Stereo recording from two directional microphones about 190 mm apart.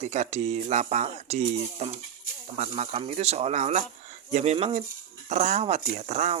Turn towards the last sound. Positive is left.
turn(degrees=-35)  # may be behind; listen again after turning